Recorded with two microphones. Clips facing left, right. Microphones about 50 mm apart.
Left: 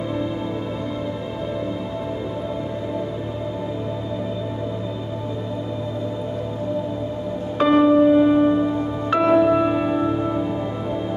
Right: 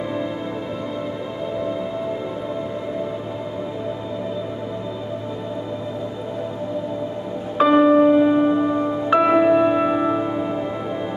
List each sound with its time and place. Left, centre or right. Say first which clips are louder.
7.5 s music: right 1 dB; centre
9.5 s singing bowl: right 2 dB; centre